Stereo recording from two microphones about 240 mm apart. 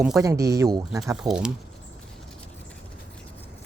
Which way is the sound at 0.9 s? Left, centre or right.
Centre.